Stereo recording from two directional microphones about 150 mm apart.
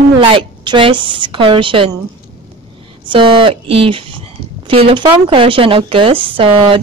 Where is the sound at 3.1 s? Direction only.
35° right (ahead or behind).